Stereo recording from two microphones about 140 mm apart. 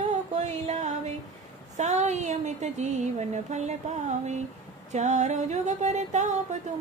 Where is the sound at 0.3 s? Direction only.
60° right (ahead or behind).